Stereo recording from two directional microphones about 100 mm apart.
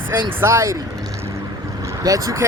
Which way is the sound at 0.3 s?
25° right (ahead or behind).